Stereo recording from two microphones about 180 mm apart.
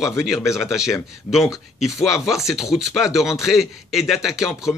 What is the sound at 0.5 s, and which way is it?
Speech, centre (ahead or behind).